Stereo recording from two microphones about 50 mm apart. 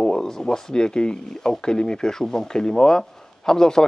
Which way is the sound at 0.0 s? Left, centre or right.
Centre.